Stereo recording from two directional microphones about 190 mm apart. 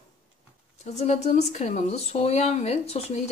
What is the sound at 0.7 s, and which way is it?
Speech, 35° left (ahead or behind).